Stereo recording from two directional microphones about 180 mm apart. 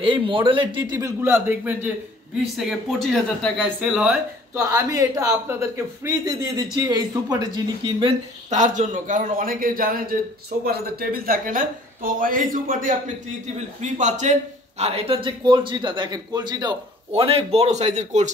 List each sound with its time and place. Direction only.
0.0 s a man's voice: 30° right (ahead or behind); by 4.1 s centre (ahead or behind)
4.6 s a man's voice: 15° right (ahead or behind)
8.5 s speech: 45° right (ahead or behind)